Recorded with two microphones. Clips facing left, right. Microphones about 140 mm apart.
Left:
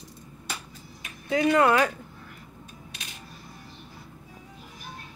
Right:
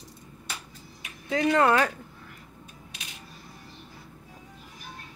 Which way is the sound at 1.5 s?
35° right (ahead or behind).